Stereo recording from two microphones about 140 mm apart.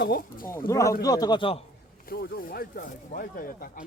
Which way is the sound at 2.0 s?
90° left.